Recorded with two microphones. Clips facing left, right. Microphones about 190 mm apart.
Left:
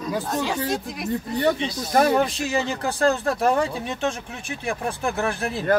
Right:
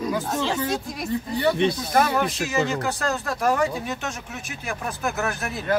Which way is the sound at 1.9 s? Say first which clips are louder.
Left 3 dB; 30° left (ahead or behind).